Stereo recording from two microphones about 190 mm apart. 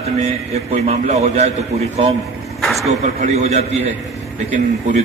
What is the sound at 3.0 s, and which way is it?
A man's voice, 40° right (ahead or behind).